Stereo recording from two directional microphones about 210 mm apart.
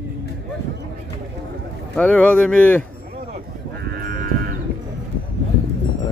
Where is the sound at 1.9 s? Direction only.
5° left (ahead or behind).